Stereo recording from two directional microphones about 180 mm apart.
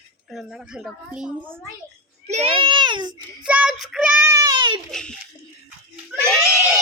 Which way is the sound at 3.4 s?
5° right (ahead or behind).